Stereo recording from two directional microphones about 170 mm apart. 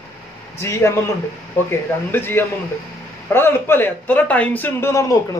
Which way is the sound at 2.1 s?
15° left (ahead or behind).